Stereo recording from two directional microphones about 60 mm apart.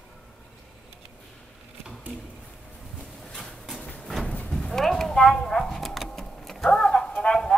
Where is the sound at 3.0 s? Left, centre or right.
Centre.